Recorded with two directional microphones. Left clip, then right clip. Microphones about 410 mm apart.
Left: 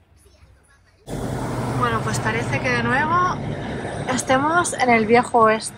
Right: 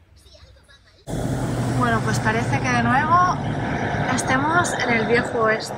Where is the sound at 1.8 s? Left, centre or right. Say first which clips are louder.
Right 1 dB; centre.